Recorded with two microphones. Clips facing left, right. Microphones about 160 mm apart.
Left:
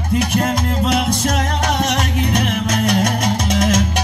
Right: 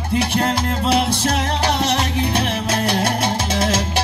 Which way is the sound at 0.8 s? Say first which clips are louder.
Right 1 dB; 30° right (ahead or behind).